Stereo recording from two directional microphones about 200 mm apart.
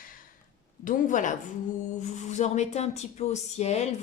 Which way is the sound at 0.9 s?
40° left (ahead or behind).